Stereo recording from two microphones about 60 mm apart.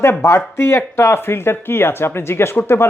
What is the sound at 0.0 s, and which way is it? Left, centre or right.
A man's voice, left.